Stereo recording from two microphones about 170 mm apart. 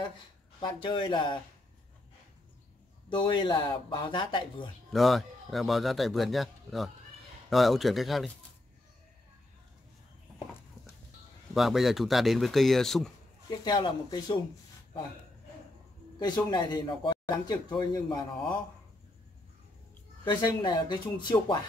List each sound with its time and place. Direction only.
0.6 s speech: 25° left (ahead or behind)
3.1 s speech: 30° left (ahead or behind)
4.9 s a man's voice: centre (ahead or behind)
11.5 s a man's voice: centre (ahead or behind)
13.5 s speech: 25° left (ahead or behind)
16.2 s speech: 25° left (ahead or behind)
20.2 s speech: 25° left (ahead or behind)